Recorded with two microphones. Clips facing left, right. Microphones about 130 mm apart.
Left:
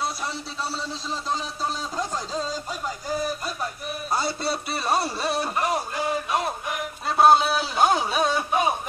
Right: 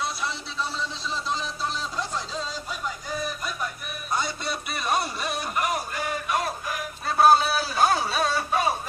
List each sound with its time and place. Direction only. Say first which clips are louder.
0.0 s a man's voice: left 1 dB; 40° left (ahead or behind); by 8.7 s 15° left (ahead or behind)